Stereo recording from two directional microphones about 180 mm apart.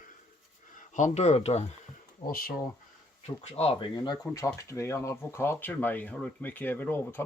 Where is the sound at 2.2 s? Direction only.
55° left (ahead or behind).